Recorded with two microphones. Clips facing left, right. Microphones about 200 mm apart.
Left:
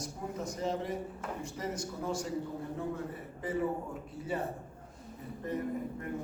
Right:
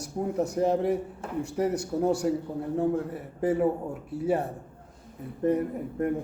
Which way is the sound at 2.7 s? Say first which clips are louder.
Right 14 dB; 50° right (ahead or behind).